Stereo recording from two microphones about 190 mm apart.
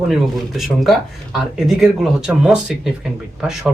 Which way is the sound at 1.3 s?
Centre (ahead or behind).